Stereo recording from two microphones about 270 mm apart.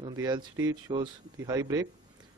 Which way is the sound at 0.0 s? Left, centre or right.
Centre.